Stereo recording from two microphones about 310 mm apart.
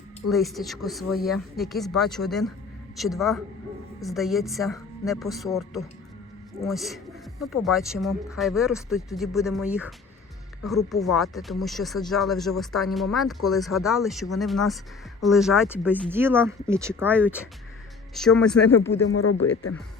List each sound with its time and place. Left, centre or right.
0.3 s speech: centre
6.7 s speech: centre
18.8 s speech: left
19.2 s speech: left